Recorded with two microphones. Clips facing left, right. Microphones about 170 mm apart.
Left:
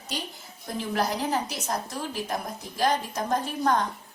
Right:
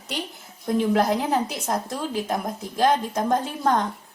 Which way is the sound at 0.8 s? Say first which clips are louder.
Right 6 dB; 55° right (ahead or behind).